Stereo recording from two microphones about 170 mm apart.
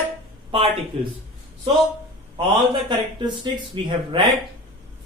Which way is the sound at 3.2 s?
25° right (ahead or behind).